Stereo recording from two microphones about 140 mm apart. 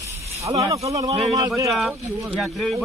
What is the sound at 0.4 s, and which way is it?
Speech, 25° right (ahead or behind).